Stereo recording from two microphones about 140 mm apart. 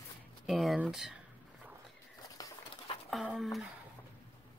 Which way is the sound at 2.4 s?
25° left (ahead or behind).